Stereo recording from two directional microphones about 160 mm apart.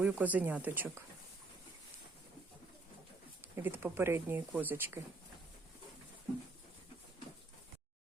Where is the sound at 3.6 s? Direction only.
15° right (ahead or behind).